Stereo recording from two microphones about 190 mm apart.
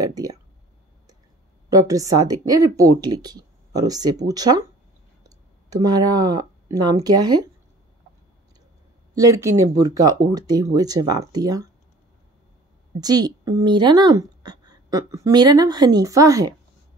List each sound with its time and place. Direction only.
0.0 s speech: 20° right (ahead or behind)
1.7 s speech: 15° right (ahead or behind)
9.1 s speech: 15° right (ahead or behind)
13.0 s speech: 20° right (ahead or behind)